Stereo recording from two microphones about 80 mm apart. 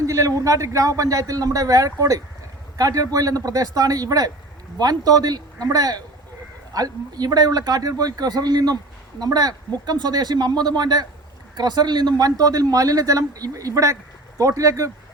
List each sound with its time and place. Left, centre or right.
0.0 s speech: right